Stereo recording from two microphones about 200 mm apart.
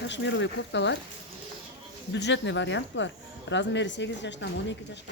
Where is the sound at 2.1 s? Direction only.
60° left (ahead or behind).